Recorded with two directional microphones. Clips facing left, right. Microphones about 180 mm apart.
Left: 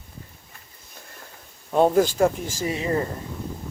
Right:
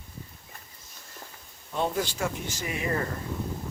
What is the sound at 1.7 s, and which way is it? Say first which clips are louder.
Speech: left 11 dB; 50° left (ahead or behind).